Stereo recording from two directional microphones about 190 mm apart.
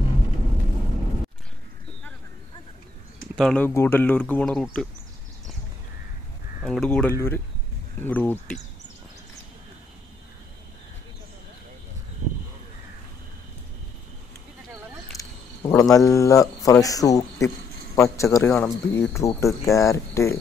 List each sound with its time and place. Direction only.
3.3 s speech: 5° left (ahead or behind)
6.6 s speech: 5° left (ahead or behind)
15.1 s a sound: 20° left (ahead or behind)
16.8 s speech: 20° left (ahead or behind)